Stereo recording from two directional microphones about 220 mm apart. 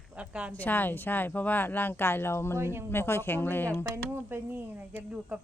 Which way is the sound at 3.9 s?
10° right (ahead or behind).